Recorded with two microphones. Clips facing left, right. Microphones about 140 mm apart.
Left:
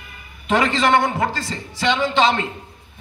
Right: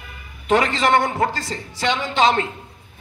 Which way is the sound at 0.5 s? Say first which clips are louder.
Even; 45° right (ahead or behind).